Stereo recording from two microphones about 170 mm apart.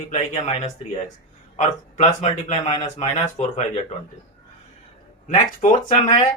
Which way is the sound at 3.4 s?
40° left (ahead or behind).